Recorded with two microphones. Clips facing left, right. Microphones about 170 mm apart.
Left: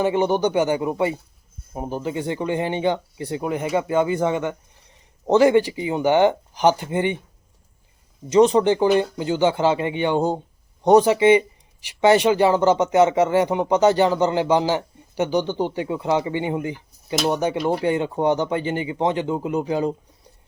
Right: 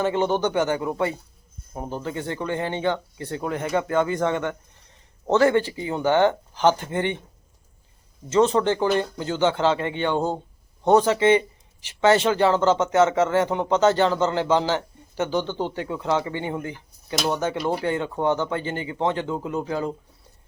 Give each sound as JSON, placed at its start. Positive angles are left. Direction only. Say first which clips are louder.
{"t": 0.0, "sound": "speech", "louder": "left 3 dB", "side_deg": 15}
{"t": 8.3, "sound": "speech", "louder": "left 4 dB", "side_deg": 15}
{"t": 17.6, "sound": "speech", "louder": "left 3 dB", "side_deg": 0}
{"t": 17.8, "sound": "speech", "louder": "left 4 dB", "side_deg": 15}